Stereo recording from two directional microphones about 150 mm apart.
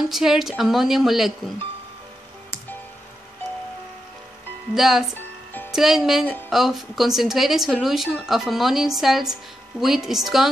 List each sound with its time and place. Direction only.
0.1 s a woman's voice: centre (ahead or behind)
4.7 s a woman's voice: 5° right (ahead or behind)